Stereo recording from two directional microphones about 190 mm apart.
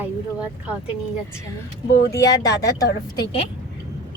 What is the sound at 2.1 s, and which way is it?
Speech, 20° left (ahead or behind).